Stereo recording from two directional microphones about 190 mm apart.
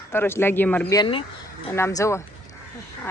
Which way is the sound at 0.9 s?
25° left (ahead or behind).